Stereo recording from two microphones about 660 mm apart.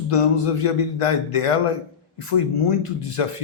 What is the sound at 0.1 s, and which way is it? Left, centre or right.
Speech, left.